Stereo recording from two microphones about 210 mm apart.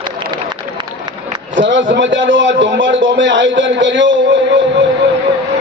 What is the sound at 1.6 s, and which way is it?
A man's voice, 60° right (ahead or behind).